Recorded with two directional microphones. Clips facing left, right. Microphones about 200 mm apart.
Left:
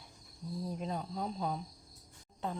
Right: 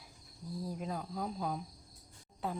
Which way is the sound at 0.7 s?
5° right (ahead or behind).